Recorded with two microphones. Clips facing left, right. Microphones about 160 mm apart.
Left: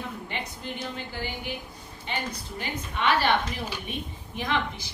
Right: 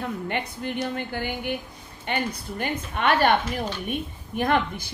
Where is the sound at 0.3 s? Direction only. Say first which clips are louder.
Right 6 dB; 60° right (ahead or behind).